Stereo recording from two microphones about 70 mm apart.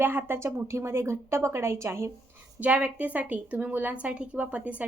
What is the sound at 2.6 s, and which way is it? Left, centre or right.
A woman's voice, centre.